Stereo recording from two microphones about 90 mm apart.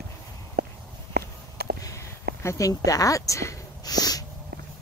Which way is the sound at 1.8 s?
35° left (ahead or behind).